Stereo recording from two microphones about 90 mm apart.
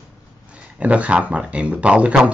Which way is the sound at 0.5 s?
15° right (ahead or behind).